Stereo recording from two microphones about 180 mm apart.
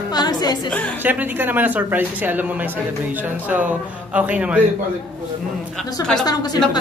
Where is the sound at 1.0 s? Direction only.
10° right (ahead or behind).